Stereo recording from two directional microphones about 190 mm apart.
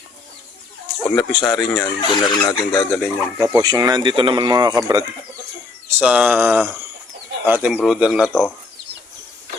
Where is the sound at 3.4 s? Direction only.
20° right (ahead or behind).